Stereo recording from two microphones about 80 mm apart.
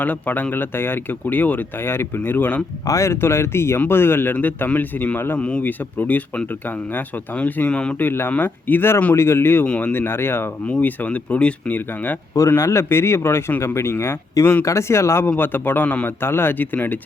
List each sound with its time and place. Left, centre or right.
0.0 s speech: left
2.8 s speech: left; by 7.9 s centre
7.9 s speech: left
9.6 s speech: centre
9.9 s speech: left
12.5 s speech: left
15.3 s speech: left
16.2 s speech: left